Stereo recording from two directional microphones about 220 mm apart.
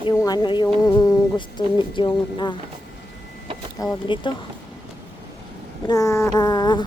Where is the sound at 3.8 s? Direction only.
20° left (ahead or behind).